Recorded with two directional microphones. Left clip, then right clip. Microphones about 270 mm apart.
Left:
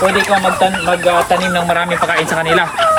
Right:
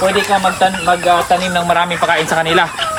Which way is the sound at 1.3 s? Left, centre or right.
Centre.